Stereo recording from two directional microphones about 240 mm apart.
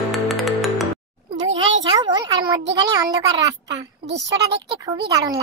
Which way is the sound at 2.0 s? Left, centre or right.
Centre.